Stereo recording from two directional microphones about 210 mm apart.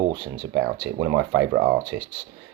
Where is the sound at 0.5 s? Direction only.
55° right (ahead or behind).